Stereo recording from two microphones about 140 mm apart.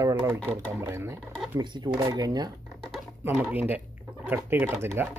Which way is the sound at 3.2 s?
10° right (ahead or behind).